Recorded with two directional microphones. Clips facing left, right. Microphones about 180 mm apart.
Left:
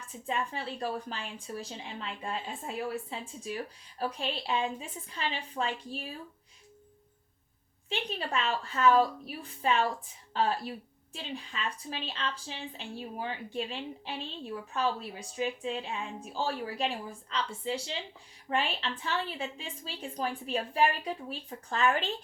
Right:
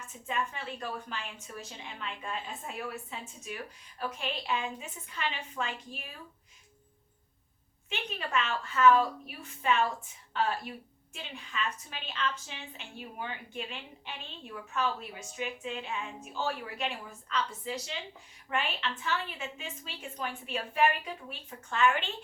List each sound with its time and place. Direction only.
0.3 s a woman's voice: 35° left (ahead or behind)
7.9 s a woman's voice: 35° left (ahead or behind)